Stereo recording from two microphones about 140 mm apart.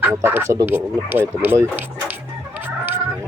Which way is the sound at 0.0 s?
15° right (ahead or behind).